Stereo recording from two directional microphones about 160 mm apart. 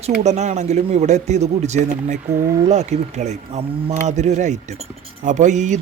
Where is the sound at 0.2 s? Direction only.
45° right (ahead or behind).